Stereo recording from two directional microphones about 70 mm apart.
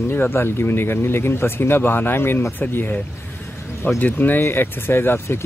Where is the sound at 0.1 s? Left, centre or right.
Left.